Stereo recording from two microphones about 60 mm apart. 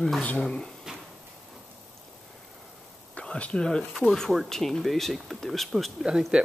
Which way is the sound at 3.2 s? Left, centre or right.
Centre.